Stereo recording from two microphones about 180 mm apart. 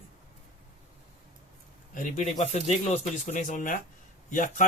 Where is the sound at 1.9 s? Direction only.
40° left (ahead or behind).